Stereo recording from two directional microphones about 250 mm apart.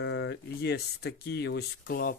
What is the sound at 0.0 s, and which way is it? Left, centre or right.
Speech, left.